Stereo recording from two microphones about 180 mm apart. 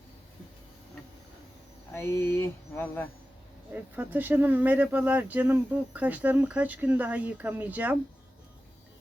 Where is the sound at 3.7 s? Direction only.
10° right (ahead or behind).